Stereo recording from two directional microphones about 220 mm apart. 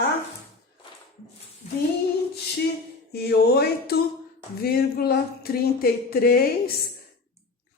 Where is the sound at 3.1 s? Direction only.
45° left (ahead or behind).